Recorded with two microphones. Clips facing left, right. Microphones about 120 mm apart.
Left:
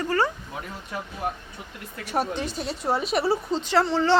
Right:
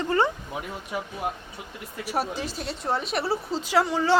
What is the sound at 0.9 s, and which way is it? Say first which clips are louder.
A woman's voice: even; 10° right (ahead or behind).